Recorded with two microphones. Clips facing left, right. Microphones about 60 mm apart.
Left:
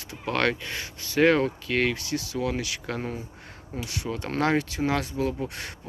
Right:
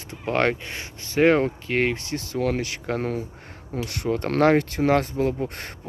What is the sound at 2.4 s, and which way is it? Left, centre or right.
Speech, right.